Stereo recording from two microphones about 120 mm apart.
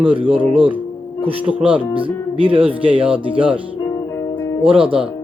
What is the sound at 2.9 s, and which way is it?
Speech, 10° right (ahead or behind).